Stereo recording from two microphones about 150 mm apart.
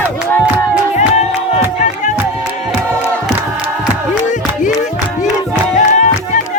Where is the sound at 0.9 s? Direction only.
50° left (ahead or behind).